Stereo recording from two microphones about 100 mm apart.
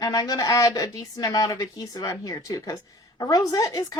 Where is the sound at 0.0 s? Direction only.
40° left (ahead or behind).